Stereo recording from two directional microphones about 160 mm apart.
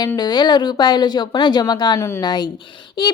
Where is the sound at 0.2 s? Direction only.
25° left (ahead or behind).